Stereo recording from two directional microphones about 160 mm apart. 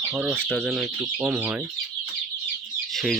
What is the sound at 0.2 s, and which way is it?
Speech, centre (ahead or behind).